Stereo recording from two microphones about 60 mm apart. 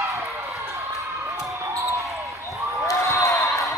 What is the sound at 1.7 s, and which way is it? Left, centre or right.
Basketball bounce, right.